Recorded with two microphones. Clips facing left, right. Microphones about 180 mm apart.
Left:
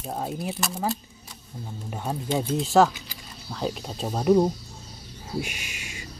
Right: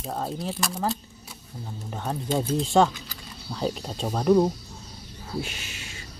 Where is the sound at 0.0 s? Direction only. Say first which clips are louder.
Even; 10° left (ahead or behind).